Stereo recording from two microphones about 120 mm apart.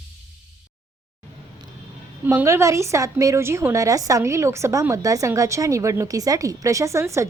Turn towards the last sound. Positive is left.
turn(degrees=-25)  # may be behind; listen again after turning